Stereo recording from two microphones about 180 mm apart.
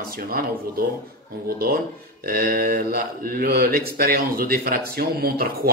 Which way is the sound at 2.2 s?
55° right (ahead or behind).